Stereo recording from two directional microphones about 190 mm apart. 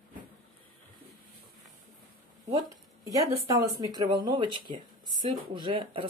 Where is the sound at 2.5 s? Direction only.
20° right (ahead or behind).